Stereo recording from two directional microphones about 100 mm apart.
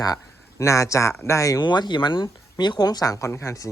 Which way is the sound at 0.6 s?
30° left (ahead or behind).